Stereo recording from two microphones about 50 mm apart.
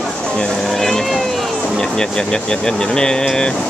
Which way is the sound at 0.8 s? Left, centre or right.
Centre.